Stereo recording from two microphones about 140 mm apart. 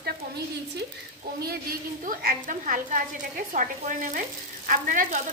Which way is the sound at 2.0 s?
85° right.